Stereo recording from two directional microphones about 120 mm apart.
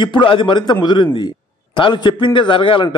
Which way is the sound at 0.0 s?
40° left (ahead or behind).